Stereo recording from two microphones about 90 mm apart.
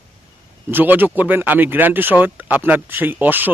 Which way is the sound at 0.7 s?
20° right (ahead or behind).